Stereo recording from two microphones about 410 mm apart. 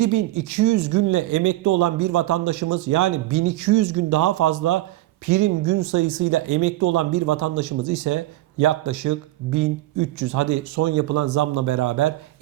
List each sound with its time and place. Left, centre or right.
0.0 s speech: right